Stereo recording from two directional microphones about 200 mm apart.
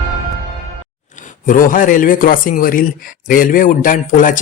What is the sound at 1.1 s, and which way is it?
Speech, 40° left (ahead or behind).